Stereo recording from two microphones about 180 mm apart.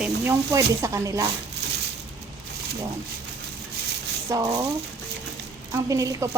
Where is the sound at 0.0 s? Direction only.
10° right (ahead or behind).